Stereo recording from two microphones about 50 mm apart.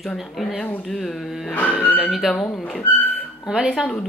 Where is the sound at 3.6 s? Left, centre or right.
Centre.